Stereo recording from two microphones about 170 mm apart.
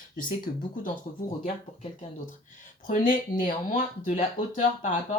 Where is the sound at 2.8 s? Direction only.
50° left (ahead or behind).